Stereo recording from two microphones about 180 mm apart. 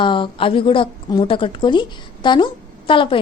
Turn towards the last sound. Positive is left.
turn(degrees=30)  # may be behind; listen again after turning